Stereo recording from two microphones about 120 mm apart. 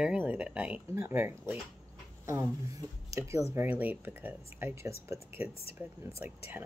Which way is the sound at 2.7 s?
25° right (ahead or behind).